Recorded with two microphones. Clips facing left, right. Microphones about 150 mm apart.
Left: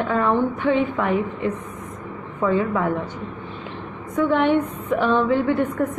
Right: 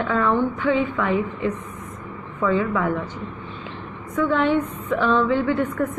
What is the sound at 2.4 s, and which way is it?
Speech, 30° left (ahead or behind).